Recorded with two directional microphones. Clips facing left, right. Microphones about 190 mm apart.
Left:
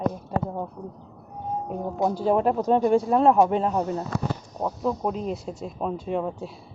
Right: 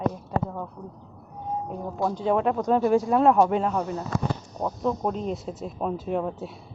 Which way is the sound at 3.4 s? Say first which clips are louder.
Left 1 dB; 35° left (ahead or behind).